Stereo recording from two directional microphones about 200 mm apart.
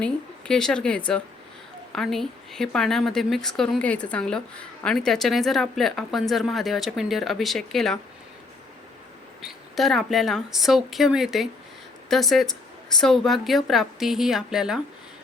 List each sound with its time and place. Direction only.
0.0 s speech: 5° left (ahead or behind)
9.5 s speech: centre (ahead or behind)